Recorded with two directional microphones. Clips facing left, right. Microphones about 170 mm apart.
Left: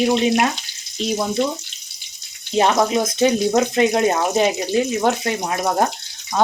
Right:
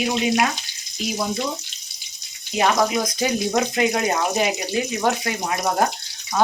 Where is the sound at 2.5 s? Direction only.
25° left (ahead or behind).